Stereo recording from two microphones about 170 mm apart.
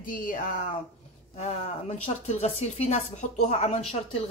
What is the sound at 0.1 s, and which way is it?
Speech, 55° left (ahead or behind).